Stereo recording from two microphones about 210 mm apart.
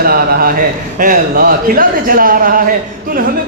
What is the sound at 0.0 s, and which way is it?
A man's voice, 45° right (ahead or behind).